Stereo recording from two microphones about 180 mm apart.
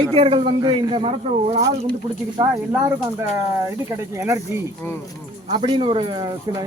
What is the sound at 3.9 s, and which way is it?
Speech, 15° right (ahead or behind).